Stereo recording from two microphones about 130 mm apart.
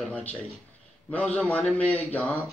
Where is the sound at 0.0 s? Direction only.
10° left (ahead or behind).